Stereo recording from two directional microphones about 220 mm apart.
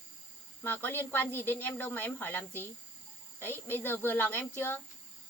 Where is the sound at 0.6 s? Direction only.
10° left (ahead or behind).